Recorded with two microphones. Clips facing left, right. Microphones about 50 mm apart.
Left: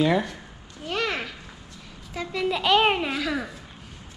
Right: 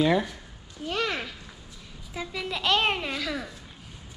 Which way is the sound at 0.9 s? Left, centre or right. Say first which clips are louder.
Left 2 dB; left.